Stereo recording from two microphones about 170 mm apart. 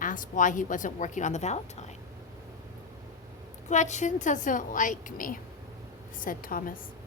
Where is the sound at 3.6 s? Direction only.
45° left (ahead or behind).